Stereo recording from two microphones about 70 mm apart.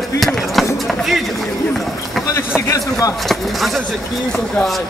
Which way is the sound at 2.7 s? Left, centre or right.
Left.